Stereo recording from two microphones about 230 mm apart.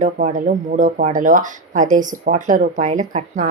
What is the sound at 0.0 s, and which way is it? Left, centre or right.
Speech, right.